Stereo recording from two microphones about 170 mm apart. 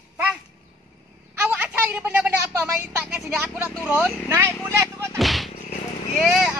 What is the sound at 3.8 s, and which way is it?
Speech, 10° right (ahead or behind).